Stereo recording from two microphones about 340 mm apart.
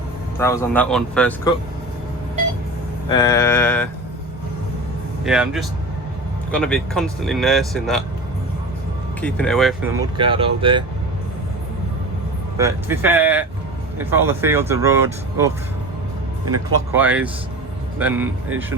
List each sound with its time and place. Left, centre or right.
0.3 s speech: centre
3.1 s a sound: centre
5.2 s speech: centre
9.2 s speech: centre
10.0 s speech: centre
12.5 s speech: centre
16.5 s speech: centre